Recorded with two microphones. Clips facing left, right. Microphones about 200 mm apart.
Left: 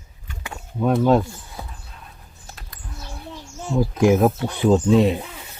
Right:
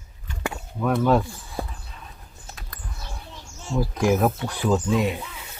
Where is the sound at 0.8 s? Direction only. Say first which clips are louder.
Left 3 dB; 20° left (ahead or behind).